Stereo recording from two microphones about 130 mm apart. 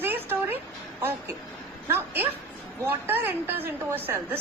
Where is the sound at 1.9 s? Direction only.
15° right (ahead or behind).